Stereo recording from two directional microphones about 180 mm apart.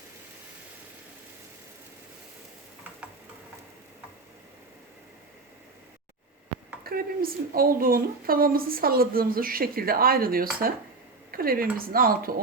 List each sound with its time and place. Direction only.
6.8 s a woman's voice: 55° right (ahead or behind)